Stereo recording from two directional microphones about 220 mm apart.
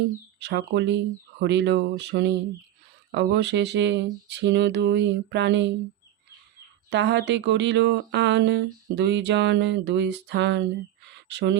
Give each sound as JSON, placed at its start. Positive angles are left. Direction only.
{"t": 0.3, "sound": "speech", "side_deg": -50}
{"t": 6.9, "sound": "speech", "side_deg": -50}
{"t": 11.1, "sound": "a sound", "side_deg": -50}